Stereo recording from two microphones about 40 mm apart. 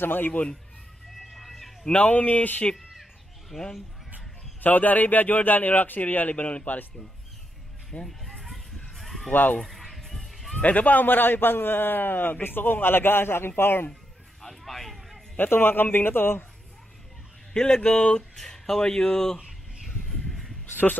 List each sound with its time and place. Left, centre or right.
0.0 s a man's voice: left
0.3 s speech: left
1.3 s a sound: centre
1.9 s speech: left
3.0 s chicken: centre
4.6 s a man's voice: left
8.0 s a sound: centre
10.6 s a man's voice: left
14.4 s a sound: centre
15.3 s a man's voice: left
17.5 s speech: centre